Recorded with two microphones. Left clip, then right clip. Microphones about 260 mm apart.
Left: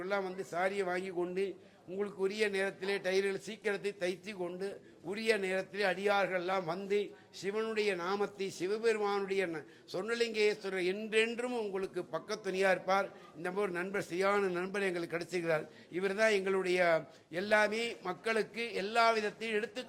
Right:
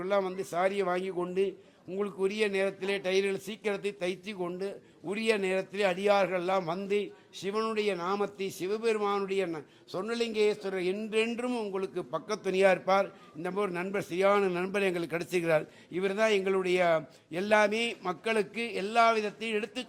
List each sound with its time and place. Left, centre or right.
0.0 s a man's voice: right
2.0 s a man's voice: right
13.4 s a man's voice: right